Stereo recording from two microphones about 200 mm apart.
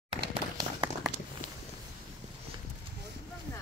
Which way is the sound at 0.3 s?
20° right (ahead or behind).